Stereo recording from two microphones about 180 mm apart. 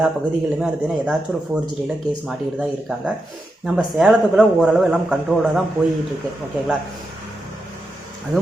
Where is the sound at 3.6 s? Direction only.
5° right (ahead or behind).